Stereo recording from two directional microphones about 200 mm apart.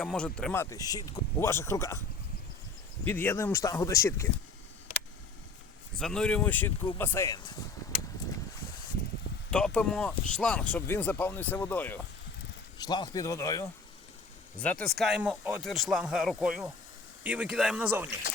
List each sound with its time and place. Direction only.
0.0 s speech: 5° left (ahead or behind)
3.1 s speech: 10° left (ahead or behind)
6.0 s speech: 5° left (ahead or behind); by 7.5 s 20° left (ahead or behind)
9.5 s speech: 5° left (ahead or behind)
12.8 s speech: 20° left (ahead or behind); by 18.1 s 10° right (ahead or behind)